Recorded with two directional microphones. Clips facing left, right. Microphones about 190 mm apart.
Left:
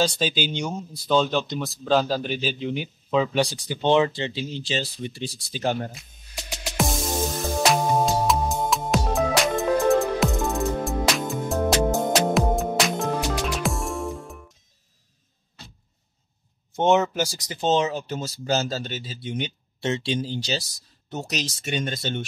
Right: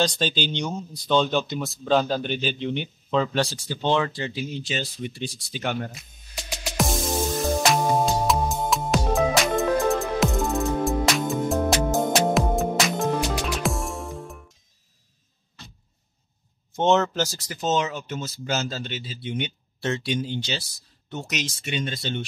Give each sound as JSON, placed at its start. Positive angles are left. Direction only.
{"t": 0.0, "sound": "speech", "side_deg": 5}
{"t": 6.6, "sound": "music", "side_deg": 0}
{"t": 16.7, "sound": "speech", "side_deg": 10}
{"t": 17.5, "sound": "speech", "side_deg": 30}
{"t": 19.8, "sound": "speech", "side_deg": 25}